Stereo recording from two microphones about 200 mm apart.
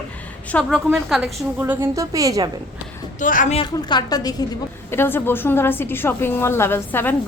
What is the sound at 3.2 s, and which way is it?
Speech, 40° left (ahead or behind).